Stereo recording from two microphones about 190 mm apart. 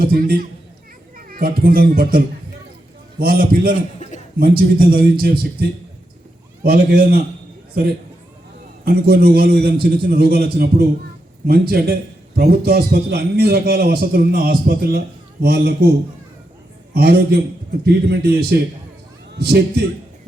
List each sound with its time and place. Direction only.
0.0 s a man's voice: 55° right (ahead or behind)
6.6 s a man's voice: 55° right (ahead or behind)
8.8 s a man's voice: 55° right (ahead or behind)
16.9 s a man's voice: 55° right (ahead or behind)